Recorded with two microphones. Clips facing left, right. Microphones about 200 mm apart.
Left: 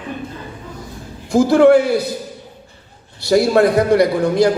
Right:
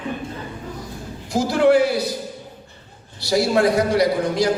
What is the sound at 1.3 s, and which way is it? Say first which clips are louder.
Speech: left 6 dB; 55° left (ahead or behind).